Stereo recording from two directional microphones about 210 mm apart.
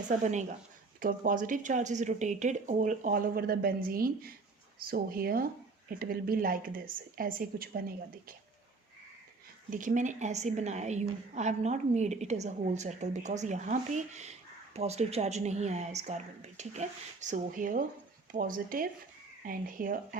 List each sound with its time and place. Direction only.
0.1 s a woman's voice: 35° right (ahead or behind)
9.6 s a woman's voice: 40° right (ahead or behind)